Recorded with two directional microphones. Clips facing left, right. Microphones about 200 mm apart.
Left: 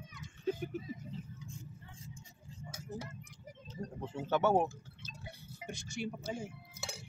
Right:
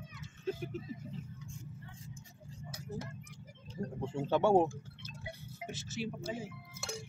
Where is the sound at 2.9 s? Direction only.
20° left (ahead or behind).